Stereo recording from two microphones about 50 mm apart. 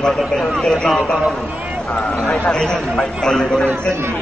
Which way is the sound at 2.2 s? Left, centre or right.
Centre.